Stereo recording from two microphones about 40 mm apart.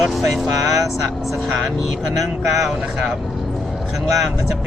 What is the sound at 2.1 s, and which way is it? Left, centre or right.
Speech, centre.